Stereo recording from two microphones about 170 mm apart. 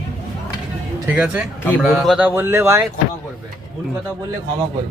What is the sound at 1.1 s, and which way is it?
Speech, 5° right (ahead or behind).